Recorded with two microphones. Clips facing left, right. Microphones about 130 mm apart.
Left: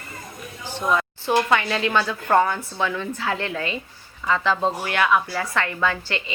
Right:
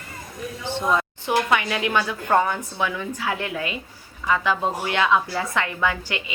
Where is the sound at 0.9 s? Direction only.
20° right (ahead or behind).